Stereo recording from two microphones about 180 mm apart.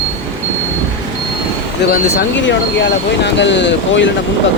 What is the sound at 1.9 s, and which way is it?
Speech, 75° left (ahead or behind).